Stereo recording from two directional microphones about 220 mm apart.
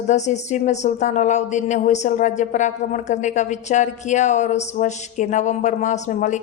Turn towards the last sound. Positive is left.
turn(degrees=35)  # may be behind; listen again after turning